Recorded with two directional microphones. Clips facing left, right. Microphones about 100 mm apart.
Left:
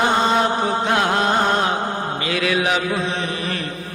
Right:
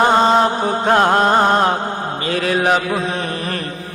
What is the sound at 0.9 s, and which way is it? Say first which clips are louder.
Mantra: right 8 dB; 40° right (ahead or behind).